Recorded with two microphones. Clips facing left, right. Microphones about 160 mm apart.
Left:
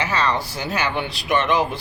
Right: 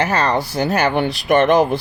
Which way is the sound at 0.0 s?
45° right (ahead or behind).